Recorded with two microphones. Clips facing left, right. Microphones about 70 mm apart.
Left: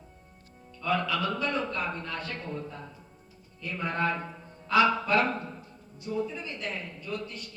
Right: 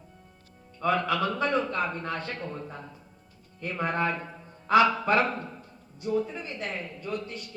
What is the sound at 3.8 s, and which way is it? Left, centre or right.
Speech, right.